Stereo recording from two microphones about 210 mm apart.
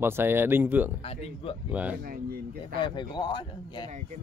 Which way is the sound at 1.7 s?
5° right (ahead or behind).